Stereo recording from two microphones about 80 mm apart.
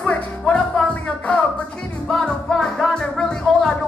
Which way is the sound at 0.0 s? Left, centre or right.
Centre.